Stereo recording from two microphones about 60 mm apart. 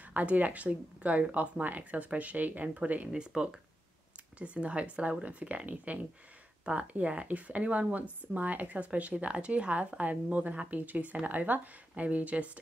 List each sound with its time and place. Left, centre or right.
0.0 s speech: right